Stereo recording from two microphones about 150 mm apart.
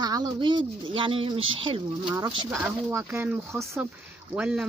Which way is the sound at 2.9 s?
15° right (ahead or behind).